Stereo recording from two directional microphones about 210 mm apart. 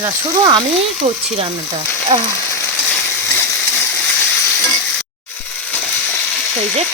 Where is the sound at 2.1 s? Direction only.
25° right (ahead or behind).